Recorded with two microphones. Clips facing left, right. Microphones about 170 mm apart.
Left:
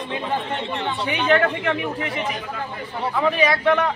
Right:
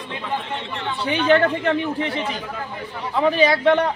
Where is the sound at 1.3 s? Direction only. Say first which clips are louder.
Right 2 dB; 30° right (ahead or behind).